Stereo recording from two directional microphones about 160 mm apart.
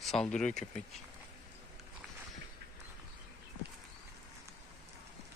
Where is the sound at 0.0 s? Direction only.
5° left (ahead or behind).